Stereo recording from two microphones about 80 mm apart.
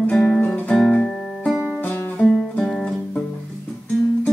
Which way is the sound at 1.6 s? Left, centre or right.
Left.